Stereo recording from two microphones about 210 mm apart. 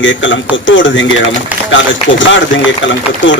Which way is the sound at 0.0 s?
60° left (ahead or behind).